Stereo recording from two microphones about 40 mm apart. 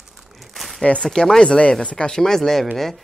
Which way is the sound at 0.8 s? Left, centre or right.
Left.